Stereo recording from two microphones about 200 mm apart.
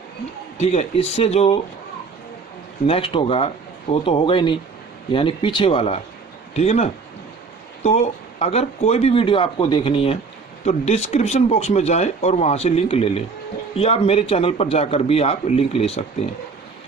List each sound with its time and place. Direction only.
0.6 s speech: 35° left (ahead or behind)
2.8 s a man's voice: 25° left (ahead or behind)